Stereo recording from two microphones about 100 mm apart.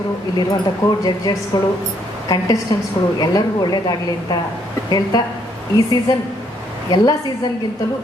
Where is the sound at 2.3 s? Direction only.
35° left (ahead or behind).